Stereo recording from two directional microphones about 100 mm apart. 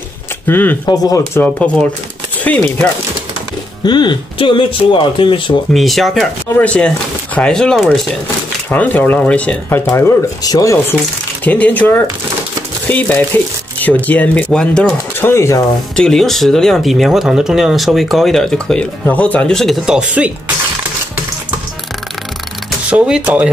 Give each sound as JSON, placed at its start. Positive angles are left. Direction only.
{"t": 0.5, "sound": "speech", "side_deg": 20}
{"t": 0.8, "sound": "speech", "side_deg": 40}
{"t": 1.3, "sound": "speech", "side_deg": 15}
{"t": 3.8, "sound": "speech", "side_deg": 50}
{"t": 5.7, "sound": "speech", "side_deg": 0}
{"t": 6.5, "sound": "speech", "side_deg": 15}
{"t": 8.6, "sound": "speech", "side_deg": 15}
{"t": 10.4, "sound": "speech", "side_deg": 35}
{"t": 11.4, "sound": "speech", "side_deg": 15}
{"t": 15.1, "sound": "speech", "side_deg": 25}
{"t": 16.0, "sound": "speech", "side_deg": 5}
{"t": 19.0, "sound": "speech", "side_deg": 15}
{"t": 22.8, "sound": "speech", "side_deg": -10}